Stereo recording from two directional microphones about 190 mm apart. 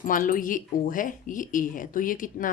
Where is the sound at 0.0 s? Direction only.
45° left (ahead or behind).